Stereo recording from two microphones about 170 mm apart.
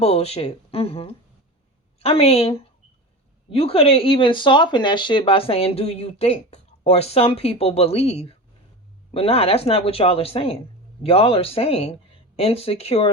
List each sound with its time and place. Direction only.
0.0 s speech: 35° left (ahead or behind)